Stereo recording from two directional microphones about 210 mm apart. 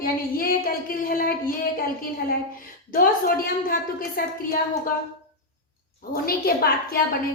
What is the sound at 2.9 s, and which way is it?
A woman's voice, 45° left (ahead or behind).